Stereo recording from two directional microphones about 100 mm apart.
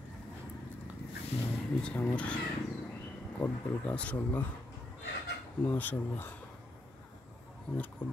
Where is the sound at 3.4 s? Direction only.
15° left (ahead or behind).